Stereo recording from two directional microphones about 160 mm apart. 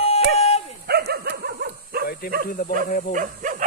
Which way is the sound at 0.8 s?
90° right.